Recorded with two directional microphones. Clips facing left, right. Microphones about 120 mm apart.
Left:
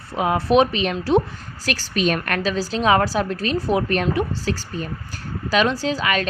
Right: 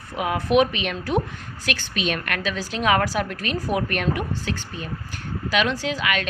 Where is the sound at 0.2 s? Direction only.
30° left (ahead or behind).